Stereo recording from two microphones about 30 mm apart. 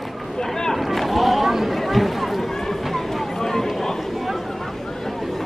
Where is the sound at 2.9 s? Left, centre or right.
Centre.